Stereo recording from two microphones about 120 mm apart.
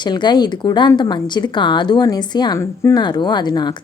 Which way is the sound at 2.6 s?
25° left (ahead or behind).